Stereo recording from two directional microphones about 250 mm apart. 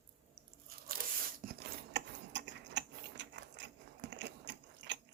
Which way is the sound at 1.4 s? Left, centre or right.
Right.